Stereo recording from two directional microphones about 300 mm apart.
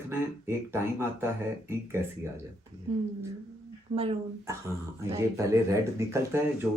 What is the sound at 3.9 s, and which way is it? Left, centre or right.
Speech, centre.